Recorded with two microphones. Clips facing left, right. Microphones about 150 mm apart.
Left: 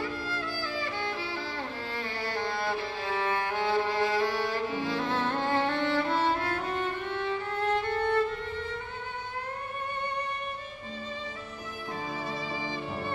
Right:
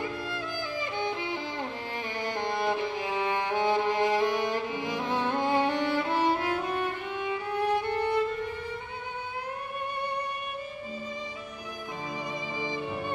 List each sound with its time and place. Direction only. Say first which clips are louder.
0.0 s music: even; 20° right (ahead or behind)
12.5 s music: right 2 dB; 15° right (ahead or behind)